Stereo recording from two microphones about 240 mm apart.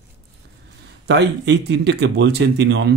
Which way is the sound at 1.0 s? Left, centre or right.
Right.